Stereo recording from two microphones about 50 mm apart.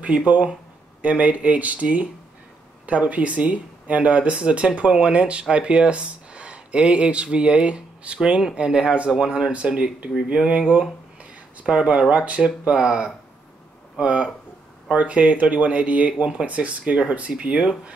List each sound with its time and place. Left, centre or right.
0.0 s speech: right